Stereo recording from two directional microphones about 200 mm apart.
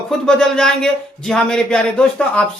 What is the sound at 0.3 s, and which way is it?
Speech, 5° left (ahead or behind).